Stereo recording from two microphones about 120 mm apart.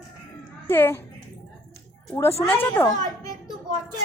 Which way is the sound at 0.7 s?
20° left (ahead or behind).